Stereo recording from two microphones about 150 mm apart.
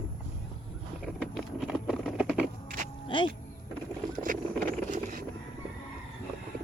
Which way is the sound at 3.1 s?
30° left (ahead or behind).